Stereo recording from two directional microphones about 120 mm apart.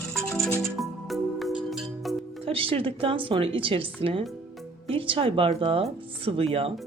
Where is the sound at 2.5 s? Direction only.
50° right (ahead or behind).